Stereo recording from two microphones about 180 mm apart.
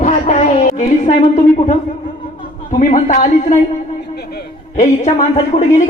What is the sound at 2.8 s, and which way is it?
Speech, 45° left (ahead or behind).